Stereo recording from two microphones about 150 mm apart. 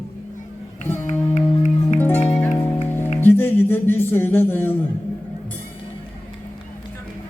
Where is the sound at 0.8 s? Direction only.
15° left (ahead or behind).